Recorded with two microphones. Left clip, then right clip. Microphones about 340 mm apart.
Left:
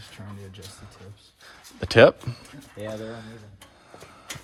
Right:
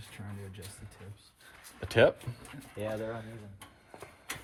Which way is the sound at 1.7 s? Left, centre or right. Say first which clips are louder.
Left 9 dB; centre.